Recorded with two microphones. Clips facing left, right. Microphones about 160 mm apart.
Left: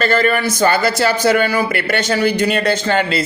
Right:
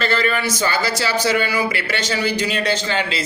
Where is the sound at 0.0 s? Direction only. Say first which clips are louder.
Left 5 dB; 50° left (ahead or behind).